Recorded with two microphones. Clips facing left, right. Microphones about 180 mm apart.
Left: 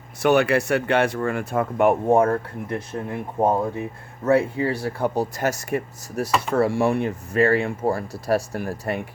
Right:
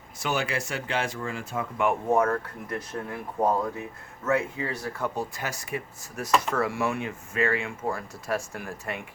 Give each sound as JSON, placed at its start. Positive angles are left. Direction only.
{"t": 0.2, "sound": "speech", "side_deg": 65}
{"t": 2.0, "sound": "speech", "side_deg": 30}